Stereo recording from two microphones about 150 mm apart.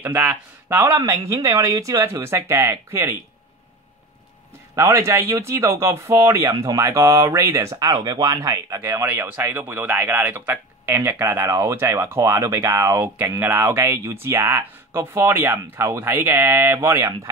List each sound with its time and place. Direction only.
0.0 s speech: 10° right (ahead or behind)
4.7 s speech: 20° right (ahead or behind)